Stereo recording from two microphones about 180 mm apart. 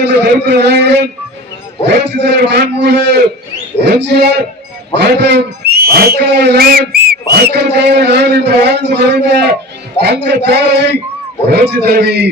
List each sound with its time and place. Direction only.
0.0 s a man's voice: 70° right (ahead or behind)